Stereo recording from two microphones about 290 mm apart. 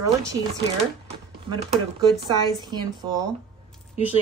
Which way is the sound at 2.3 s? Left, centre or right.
Centre.